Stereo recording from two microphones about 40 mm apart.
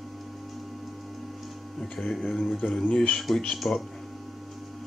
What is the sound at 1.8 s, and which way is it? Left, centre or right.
Speech, centre.